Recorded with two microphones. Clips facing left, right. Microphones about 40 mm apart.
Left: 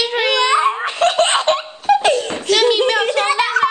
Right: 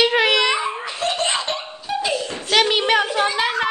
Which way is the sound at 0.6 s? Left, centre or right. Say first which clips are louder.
Left 8 dB; left.